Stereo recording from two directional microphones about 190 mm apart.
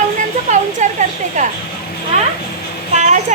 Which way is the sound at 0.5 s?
40° right (ahead or behind).